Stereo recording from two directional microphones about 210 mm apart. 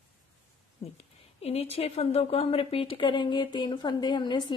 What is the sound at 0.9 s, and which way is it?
A woman's voice, 30° left (ahead or behind).